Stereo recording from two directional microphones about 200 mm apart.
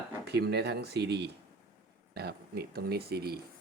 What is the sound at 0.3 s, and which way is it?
Speech, 55° right (ahead or behind).